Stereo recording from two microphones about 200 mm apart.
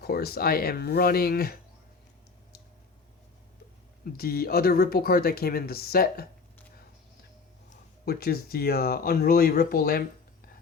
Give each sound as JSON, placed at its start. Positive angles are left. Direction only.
{"t": 0.0, "sound": "speech", "side_deg": 50}
{"t": 4.0, "sound": "speech", "side_deg": 50}
{"t": 7.7, "sound": "speech", "side_deg": 50}